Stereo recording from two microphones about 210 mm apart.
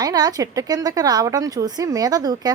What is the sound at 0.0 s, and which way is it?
A woman's voice, 20° right (ahead or behind).